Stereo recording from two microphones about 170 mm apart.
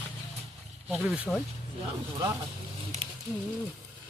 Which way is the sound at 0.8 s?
Centre (ahead or behind).